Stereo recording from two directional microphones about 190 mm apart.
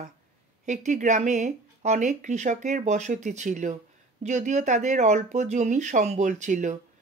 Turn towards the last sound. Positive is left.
turn(degrees=-40)  # may be behind; listen again after turning